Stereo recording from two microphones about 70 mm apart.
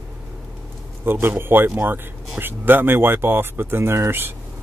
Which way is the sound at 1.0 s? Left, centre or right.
Right.